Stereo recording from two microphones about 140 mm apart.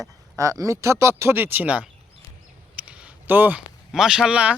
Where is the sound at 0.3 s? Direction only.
25° right (ahead or behind).